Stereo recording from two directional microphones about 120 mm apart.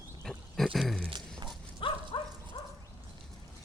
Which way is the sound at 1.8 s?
45° left (ahead or behind).